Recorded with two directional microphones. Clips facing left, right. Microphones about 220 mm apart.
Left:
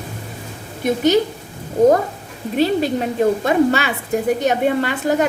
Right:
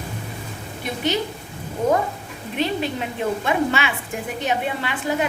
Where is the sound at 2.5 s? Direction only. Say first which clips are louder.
Left 7 dB; 40° left (ahead or behind).